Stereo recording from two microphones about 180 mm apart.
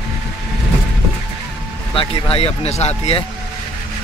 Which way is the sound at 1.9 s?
30° left (ahead or behind).